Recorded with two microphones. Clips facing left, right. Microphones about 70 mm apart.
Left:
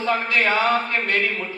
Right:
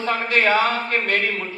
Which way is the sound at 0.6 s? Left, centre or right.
Left.